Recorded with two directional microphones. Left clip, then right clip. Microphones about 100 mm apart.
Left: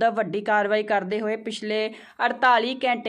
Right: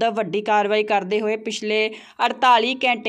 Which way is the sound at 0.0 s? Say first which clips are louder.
Right 1 dB; 45° right (ahead or behind).